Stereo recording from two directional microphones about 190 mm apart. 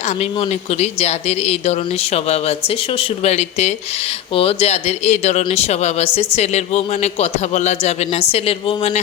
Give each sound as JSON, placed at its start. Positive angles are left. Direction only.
{"t": 0.8, "sound": "speech", "side_deg": 35}